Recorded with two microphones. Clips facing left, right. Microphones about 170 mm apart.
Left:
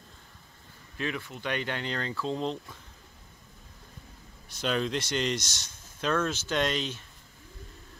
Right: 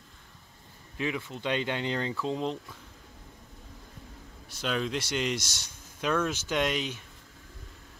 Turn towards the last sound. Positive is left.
turn(degrees=-10)  # may be behind; listen again after turning